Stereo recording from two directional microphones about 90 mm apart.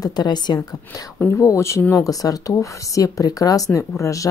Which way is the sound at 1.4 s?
35° left (ahead or behind).